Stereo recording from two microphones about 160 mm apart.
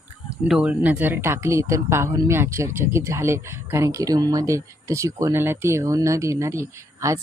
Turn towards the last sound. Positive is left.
turn(degrees=-20)  # may be behind; listen again after turning